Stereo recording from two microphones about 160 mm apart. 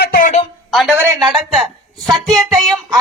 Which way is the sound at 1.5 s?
Centre (ahead or behind).